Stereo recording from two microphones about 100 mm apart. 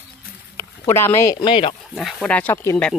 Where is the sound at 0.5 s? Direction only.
25° left (ahead or behind).